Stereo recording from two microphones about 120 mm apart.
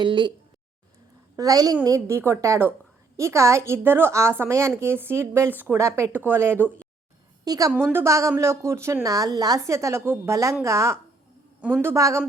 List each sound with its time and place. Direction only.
0.0 s a woman's voice: 40° right (ahead or behind)
1.4 s a woman's voice: 30° right (ahead or behind)
7.4 s a woman's voice: 30° right (ahead or behind)